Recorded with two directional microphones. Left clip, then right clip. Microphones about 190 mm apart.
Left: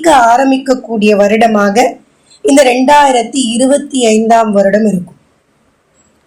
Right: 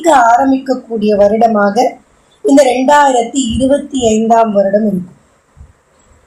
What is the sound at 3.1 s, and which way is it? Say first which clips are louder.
A woman's voice: left 1 dB; 30° left (ahead or behind).